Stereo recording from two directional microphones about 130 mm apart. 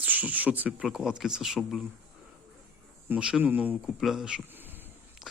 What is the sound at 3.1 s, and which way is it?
Speech, 10° right (ahead or behind).